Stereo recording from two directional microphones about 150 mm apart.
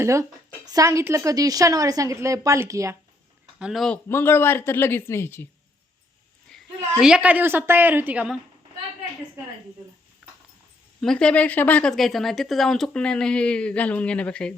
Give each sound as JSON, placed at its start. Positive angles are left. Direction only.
{"t": 0.0, "sound": "a woman's voice", "side_deg": -20}
{"t": 3.6, "sound": "speech", "side_deg": 0}
{"t": 3.9, "sound": "speech", "side_deg": 15}
{"t": 6.5, "sound": "a sound", "side_deg": 5}
{"t": 7.0, "sound": "a woman's voice", "side_deg": -5}
{"t": 11.0, "sound": "speech", "side_deg": 5}